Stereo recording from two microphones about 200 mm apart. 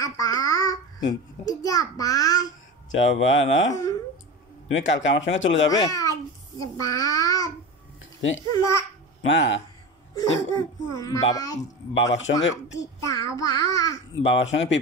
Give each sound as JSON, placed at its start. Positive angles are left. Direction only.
{"t": 0.0, "sound": "a child's voice", "side_deg": 15}
{"t": 2.9, "sound": "speech", "side_deg": 70}
{"t": 5.7, "sound": "a child's voice", "side_deg": 15}
{"t": 9.2, "sound": "speech", "side_deg": 65}
{"t": 10.1, "sound": "a child's voice", "side_deg": 20}
{"t": 11.9, "sound": "speech", "side_deg": 65}
{"t": 12.7, "sound": "a child's voice", "side_deg": 15}
{"t": 14.2, "sound": "speech", "side_deg": 65}